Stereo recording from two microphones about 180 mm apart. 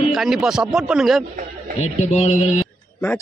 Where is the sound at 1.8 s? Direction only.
35° left (ahead or behind).